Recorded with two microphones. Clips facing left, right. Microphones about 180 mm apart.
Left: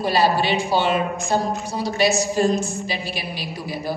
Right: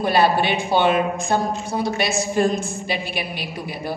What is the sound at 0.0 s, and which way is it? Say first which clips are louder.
A woman's voice: right 1 dB; 55° right (ahead or behind).